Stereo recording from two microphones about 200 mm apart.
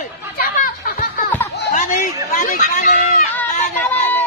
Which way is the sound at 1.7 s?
35° left (ahead or behind).